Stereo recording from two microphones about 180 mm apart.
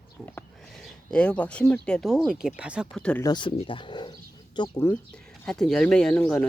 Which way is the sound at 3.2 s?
25° left (ahead or behind).